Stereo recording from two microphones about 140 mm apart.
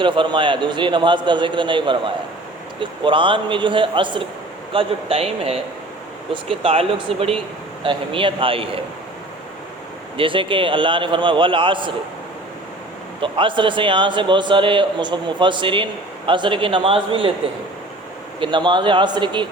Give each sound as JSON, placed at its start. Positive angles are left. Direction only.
{"t": 0.0, "sound": "a man's voice", "side_deg": -35}
{"t": 6.6, "sound": "a man's voice", "side_deg": -45}
{"t": 10.2, "sound": "a man's voice", "side_deg": -40}
{"t": 13.2, "sound": "a man's voice", "side_deg": -35}
{"t": 18.3, "sound": "a man's voice", "side_deg": -35}